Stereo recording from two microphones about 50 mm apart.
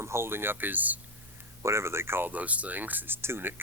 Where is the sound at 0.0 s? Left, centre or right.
Right.